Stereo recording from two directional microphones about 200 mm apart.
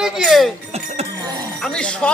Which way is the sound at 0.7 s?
30° right (ahead or behind).